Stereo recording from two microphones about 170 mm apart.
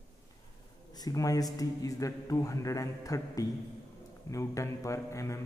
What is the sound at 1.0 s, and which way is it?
A man's voice, 20° left (ahead or behind).